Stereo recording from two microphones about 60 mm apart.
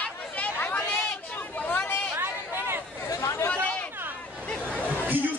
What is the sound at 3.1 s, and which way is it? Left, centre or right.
Chatter, left.